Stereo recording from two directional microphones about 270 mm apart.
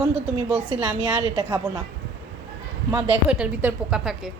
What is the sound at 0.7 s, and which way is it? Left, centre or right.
Speech, centre.